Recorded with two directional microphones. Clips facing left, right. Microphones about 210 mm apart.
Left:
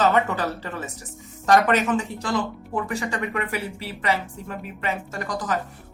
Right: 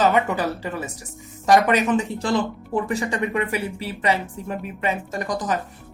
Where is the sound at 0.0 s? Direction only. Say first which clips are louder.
Right 1 dB; 15° right (ahead or behind).